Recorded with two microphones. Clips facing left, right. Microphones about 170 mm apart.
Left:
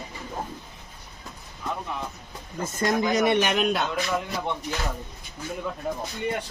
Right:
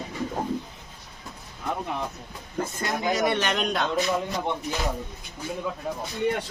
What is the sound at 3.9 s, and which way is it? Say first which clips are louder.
Speech: right 2 dB; 20° right (ahead or behind).